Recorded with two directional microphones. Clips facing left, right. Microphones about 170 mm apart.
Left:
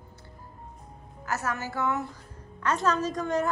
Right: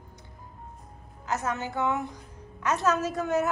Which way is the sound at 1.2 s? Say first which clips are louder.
Right 1 dB; 20° right (ahead or behind).